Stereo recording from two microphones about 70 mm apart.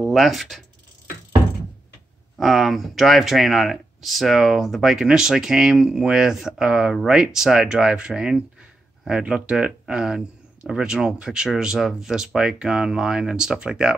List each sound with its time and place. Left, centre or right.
0.0 s speech: centre
2.3 s speech: centre